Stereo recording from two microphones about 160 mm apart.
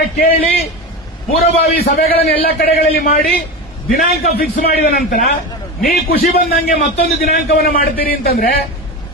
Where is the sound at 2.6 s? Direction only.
70° left (ahead or behind).